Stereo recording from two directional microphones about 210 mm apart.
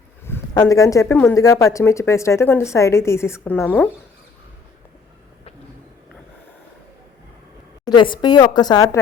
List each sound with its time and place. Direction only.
0.3 s speech: 15° left (ahead or behind)
7.9 s speech: 20° left (ahead or behind)